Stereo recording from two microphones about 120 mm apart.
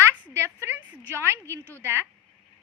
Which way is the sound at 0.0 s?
20° right (ahead or behind).